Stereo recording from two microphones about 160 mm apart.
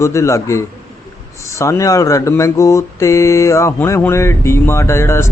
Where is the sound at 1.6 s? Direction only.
20° left (ahead or behind).